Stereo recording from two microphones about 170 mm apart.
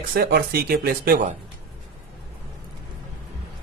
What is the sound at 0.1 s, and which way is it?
Speech, 65° right (ahead or behind).